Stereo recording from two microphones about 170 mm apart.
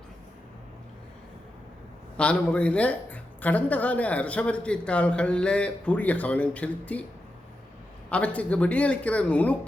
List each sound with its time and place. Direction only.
2.1 s a woman's voice: 5° left (ahead or behind)
8.1 s a woman's voice: 10° left (ahead or behind)